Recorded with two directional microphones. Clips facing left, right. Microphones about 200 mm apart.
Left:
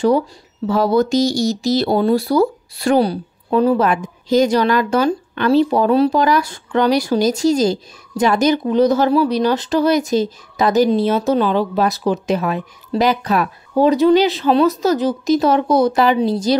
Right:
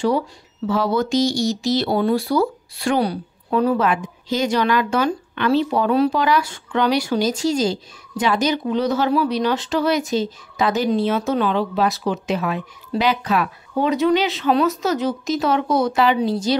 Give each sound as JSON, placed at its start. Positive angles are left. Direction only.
{"t": 0.7, "sound": "speech", "side_deg": 40}